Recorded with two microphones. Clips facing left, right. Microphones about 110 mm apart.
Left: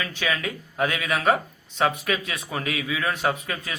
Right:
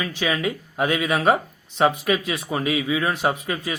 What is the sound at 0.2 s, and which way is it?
A man's voice, 25° right (ahead or behind).